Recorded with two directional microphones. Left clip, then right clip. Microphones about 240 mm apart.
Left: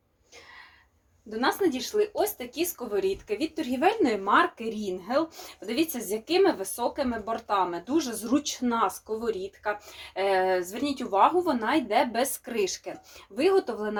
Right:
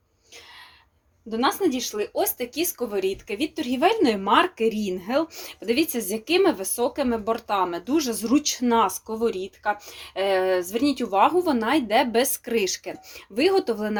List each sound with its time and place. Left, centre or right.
1.4 s speech: right
10.2 s speech: right